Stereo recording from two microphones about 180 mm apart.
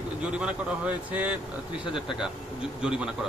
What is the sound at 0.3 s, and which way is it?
Speech, 5° right (ahead or behind).